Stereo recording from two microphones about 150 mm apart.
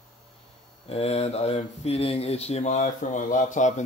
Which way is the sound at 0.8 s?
45° left (ahead or behind).